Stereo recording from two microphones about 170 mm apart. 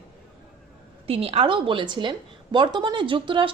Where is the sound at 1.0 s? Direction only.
35° right (ahead or behind).